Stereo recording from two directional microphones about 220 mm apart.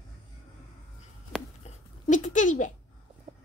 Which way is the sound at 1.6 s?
35° left (ahead or behind).